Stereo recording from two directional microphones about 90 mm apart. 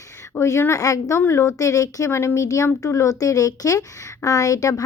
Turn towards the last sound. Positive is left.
turn(degrees=40)  # may be behind; listen again after turning